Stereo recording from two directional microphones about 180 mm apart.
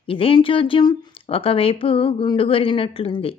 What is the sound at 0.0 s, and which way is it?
Speech, 30° left (ahead or behind).